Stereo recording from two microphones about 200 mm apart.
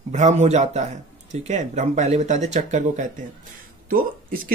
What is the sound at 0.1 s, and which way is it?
Speech, 35° right (ahead or behind).